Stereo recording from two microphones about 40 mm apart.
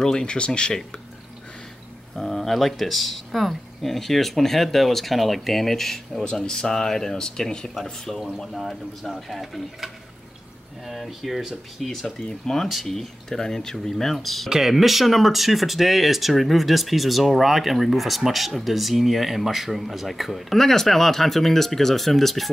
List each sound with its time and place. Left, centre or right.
0.0 s speech: centre
2.1 s speech: centre
10.9 s speech: centre
11.9 s speech: centre